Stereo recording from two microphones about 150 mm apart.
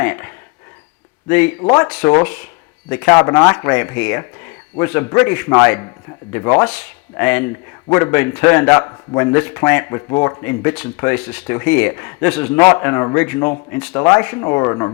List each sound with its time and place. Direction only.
0.0 s a man's voice: 10° left (ahead or behind)
3.1 s speech: 25° left (ahead or behind)
3.5 s a man's voice: 10° left (ahead or behind)